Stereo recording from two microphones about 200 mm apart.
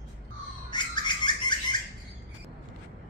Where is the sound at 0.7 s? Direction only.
20° left (ahead or behind).